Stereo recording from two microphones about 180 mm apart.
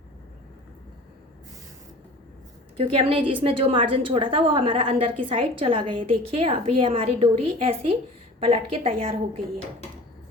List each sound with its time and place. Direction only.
2.7 s a woman's voice: 30° right (ahead or behind)